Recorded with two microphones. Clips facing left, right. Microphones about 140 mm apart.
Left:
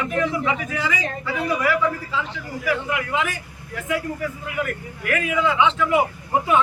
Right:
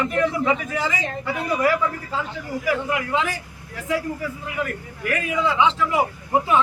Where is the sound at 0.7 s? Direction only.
35° right (ahead or behind).